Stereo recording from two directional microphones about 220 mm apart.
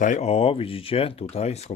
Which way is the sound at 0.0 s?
30° left (ahead or behind).